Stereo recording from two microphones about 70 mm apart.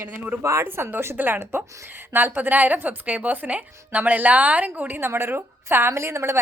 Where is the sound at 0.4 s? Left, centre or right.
Right.